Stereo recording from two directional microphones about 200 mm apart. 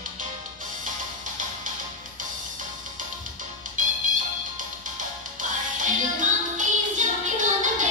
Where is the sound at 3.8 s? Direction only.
40° right (ahead or behind).